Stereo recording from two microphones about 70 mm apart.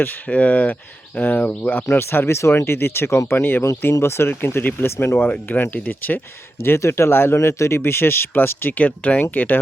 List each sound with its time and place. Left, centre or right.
0.0 s speech: centre